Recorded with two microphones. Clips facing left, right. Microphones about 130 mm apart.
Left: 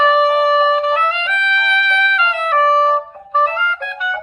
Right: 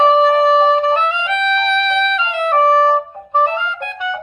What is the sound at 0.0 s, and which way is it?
Music, 25° right (ahead or behind).